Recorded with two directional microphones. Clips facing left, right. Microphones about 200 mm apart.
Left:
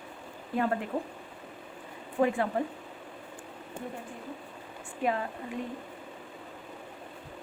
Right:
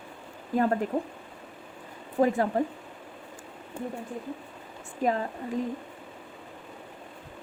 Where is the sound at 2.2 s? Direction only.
40° right (ahead or behind).